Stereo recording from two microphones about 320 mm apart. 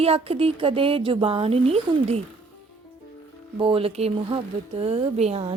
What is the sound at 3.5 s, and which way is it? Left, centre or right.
Speech, centre.